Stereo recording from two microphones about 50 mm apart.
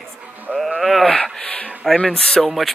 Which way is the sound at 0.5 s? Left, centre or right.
Centre.